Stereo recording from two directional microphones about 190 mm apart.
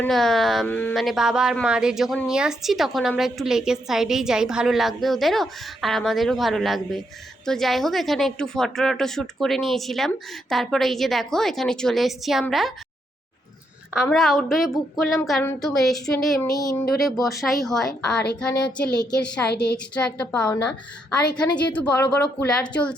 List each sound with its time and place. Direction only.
0.0 s speech: centre (ahead or behind)
13.9 s speech: centre (ahead or behind)
16.4 s a sound: 20° left (ahead or behind)
17.2 s a woman's voice: centre (ahead or behind)